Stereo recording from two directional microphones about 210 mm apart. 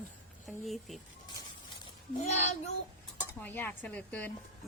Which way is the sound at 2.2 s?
35° left (ahead or behind).